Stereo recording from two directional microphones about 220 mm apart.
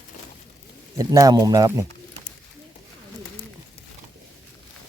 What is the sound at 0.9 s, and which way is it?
Speech, 15° right (ahead or behind).